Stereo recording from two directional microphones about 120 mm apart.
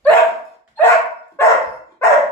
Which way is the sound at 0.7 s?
20° left (ahead or behind).